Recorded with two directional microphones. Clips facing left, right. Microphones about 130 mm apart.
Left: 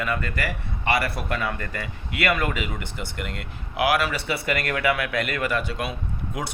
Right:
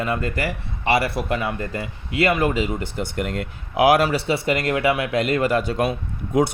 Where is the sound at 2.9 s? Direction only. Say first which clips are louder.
Right 7 dB; 45° right (ahead or behind).